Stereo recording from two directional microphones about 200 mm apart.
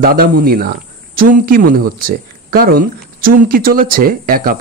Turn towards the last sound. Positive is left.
turn(degrees=-45)  # may be behind; listen again after turning